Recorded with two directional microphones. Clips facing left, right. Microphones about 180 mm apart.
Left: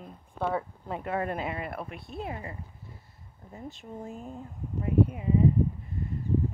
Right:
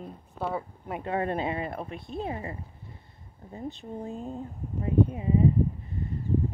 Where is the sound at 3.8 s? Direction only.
35° right (ahead or behind).